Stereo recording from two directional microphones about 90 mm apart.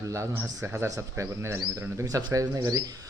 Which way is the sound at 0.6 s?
25° right (ahead or behind).